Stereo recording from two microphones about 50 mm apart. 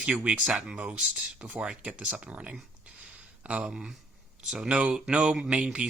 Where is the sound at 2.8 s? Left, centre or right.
Centre.